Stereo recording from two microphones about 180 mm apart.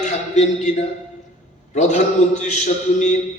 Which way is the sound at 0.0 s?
40° left (ahead or behind).